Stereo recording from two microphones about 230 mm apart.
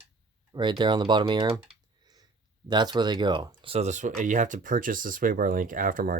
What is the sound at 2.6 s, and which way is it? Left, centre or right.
Speech, centre.